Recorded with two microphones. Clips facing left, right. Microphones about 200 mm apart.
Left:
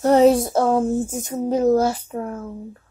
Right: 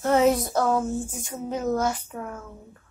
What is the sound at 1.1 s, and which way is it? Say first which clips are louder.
Speech: left 9 dB; 40° left (ahead or behind).